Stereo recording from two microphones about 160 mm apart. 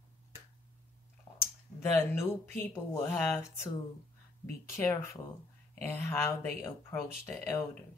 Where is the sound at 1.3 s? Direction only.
40° left (ahead or behind).